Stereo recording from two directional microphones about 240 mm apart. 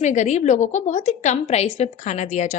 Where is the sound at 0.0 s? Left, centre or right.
Left.